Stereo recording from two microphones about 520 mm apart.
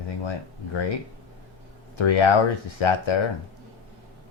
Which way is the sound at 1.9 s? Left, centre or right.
Left.